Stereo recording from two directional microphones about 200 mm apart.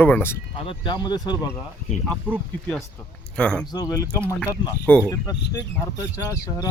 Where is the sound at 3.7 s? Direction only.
20° left (ahead or behind).